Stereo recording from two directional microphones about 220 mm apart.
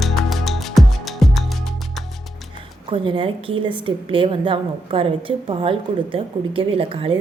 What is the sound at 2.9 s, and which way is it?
A woman's voice, 25° right (ahead or behind).